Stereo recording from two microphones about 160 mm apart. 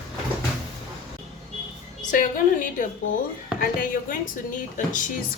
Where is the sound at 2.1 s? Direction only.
55° left (ahead or behind).